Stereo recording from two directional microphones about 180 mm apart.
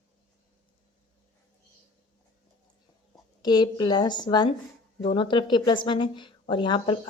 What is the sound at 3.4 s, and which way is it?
A woman's voice, 25° left (ahead or behind).